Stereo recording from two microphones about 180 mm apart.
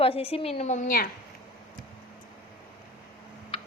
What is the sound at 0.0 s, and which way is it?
A woman's voice, 30° left (ahead or behind).